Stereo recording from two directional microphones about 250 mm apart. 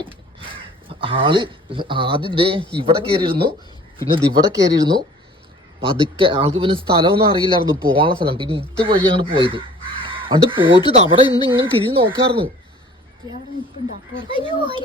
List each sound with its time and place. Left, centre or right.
0.0 s crow: right
2.7 s speech: right
11.0 s speech: centre
11.4 s speech: centre
14.2 s speech: right